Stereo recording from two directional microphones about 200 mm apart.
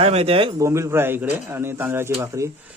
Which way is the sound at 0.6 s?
15° right (ahead or behind).